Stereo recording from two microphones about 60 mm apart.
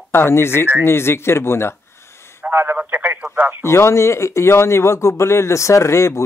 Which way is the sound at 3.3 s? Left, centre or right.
Right.